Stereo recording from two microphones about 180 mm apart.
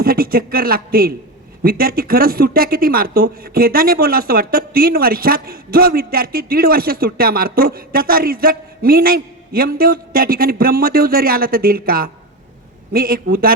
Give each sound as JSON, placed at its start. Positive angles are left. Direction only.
{"t": 0.0, "sound": "speech", "side_deg": -55}